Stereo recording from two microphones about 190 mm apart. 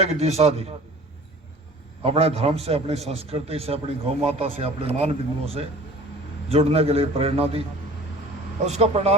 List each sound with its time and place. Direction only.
0.0 s a man's voice: 35° right (ahead or behind)
2.0 s a man's voice: 30° right (ahead or behind)
8.6 s a man's voice: 35° right (ahead or behind)